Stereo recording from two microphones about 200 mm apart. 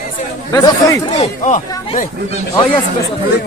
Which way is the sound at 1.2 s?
40° left (ahead or behind).